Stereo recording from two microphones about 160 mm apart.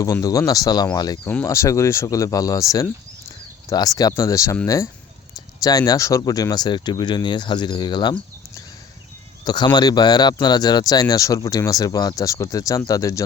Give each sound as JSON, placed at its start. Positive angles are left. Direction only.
{"t": 0.0, "sound": "speech", "side_deg": 20}
{"t": 1.2, "sound": "speech", "side_deg": 10}